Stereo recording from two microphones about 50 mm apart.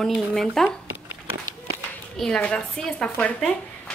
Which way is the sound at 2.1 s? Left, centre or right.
Centre.